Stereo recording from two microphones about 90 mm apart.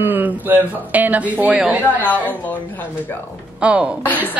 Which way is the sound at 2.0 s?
20° left (ahead or behind).